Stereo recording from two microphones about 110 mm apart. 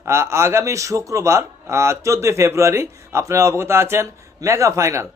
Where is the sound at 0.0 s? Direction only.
25° right (ahead or behind).